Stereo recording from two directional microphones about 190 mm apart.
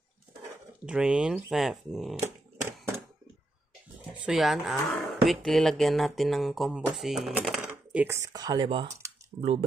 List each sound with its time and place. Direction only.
0.8 s speech: 5° right (ahead or behind)
2.1 s a sound: 15° right (ahead or behind)
4.2 s speech: centre (ahead or behind)
8.3 s speech: 20° right (ahead or behind)